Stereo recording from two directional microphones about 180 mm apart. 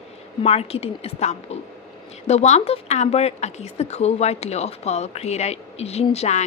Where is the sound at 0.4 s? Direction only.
35° left (ahead or behind).